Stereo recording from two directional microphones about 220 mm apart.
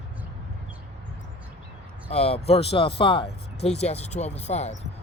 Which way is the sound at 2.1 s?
25° left (ahead or behind).